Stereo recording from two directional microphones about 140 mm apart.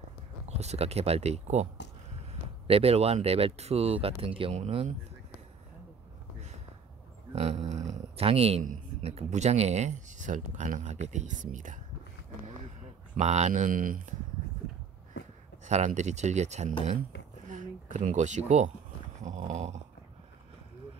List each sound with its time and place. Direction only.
0.6 s speech: 50° right (ahead or behind)
2.7 s speech: 45° right (ahead or behind)
7.3 s a sound: 50° right (ahead or behind)
9.0 s speech: 50° right (ahead or behind)
13.1 s speech: 55° right (ahead or behind); by 14.1 s 75° right (ahead or behind)
15.6 s speech: 55° right (ahead or behind)
17.5 s a sound: 65° right (ahead or behind)